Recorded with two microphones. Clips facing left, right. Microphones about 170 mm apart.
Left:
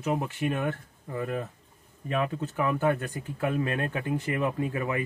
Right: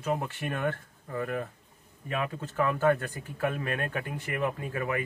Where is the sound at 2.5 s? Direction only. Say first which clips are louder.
Right 2 dB; 15° left (ahead or behind).